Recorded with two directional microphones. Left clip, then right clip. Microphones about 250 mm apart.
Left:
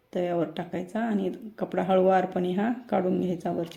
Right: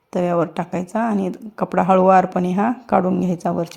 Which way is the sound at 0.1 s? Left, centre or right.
Right.